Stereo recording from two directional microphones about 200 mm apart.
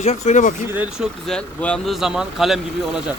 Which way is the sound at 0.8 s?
5° right (ahead or behind).